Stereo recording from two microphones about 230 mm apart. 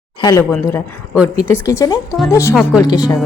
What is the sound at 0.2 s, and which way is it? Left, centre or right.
Speech, centre.